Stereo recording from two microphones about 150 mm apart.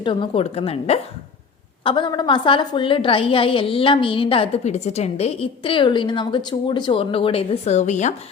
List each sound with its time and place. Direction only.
0.0 s a woman's voice: 35° left (ahead or behind); by 8.1 s 50° left (ahead or behind)